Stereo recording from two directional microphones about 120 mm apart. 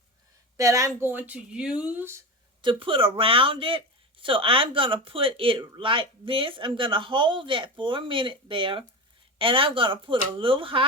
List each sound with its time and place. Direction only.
0.5 s a woman's voice: 25° right (ahead or behind)
2.6 s speech: 45° right (ahead or behind)